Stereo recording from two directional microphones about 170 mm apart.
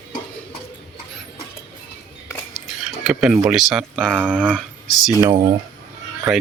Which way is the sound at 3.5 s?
Centre (ahead or behind).